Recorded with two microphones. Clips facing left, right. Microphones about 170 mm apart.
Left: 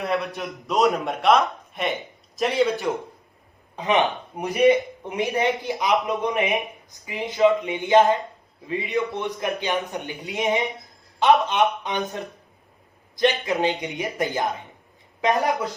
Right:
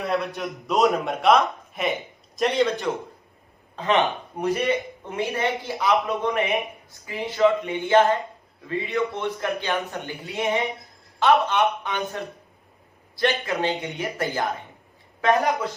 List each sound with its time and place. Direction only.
0.0 s a man's voice: centre (ahead or behind)
3.8 s a woman's voice: 15° left (ahead or behind)